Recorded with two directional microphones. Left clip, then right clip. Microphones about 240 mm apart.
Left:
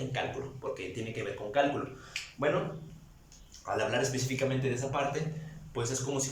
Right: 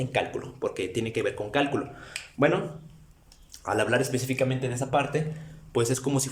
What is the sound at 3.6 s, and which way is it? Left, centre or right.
Speech, right.